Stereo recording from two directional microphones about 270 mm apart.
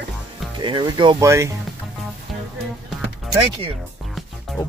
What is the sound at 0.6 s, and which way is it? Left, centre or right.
Speech, centre.